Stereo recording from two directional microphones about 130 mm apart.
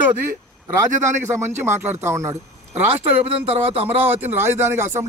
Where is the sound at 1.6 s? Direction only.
20° right (ahead or behind).